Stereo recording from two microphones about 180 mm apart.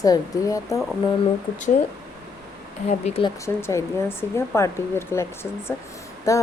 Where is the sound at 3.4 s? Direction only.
15° left (ahead or behind).